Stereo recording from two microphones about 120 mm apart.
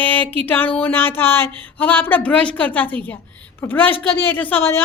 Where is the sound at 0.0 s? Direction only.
15° left (ahead or behind).